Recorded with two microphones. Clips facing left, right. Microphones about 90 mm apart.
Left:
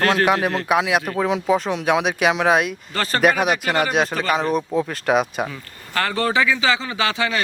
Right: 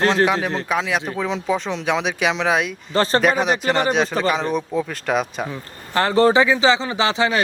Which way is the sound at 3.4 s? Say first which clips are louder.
Right 1 dB; 35° right (ahead or behind).